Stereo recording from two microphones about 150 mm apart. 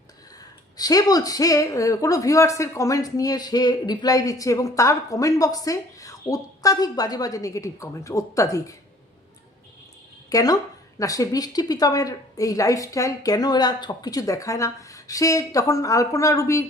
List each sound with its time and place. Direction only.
0.8 s speech: 25° left (ahead or behind)
10.2 s speech: 25° left (ahead or behind)